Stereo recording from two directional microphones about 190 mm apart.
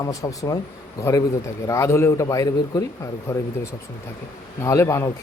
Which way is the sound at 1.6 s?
15° left (ahead or behind).